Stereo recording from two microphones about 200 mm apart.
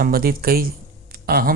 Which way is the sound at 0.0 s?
50° right (ahead or behind).